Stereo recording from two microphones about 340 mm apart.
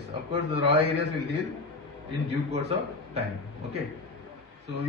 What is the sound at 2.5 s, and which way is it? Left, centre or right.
Speech, centre.